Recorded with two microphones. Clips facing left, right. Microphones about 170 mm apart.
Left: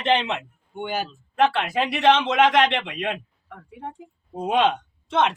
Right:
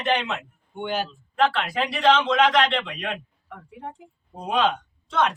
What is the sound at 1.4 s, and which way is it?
Speech, 25° left (ahead or behind).